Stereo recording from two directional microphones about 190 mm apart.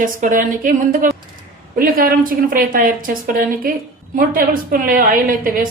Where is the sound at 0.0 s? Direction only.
45° right (ahead or behind).